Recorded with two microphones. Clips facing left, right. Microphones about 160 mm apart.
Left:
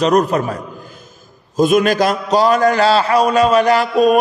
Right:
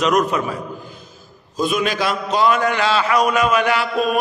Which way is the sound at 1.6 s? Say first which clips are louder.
Left 7 dB; 45° left (ahead or behind).